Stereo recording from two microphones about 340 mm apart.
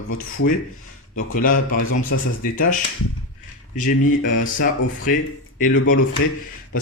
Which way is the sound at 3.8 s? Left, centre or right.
Left.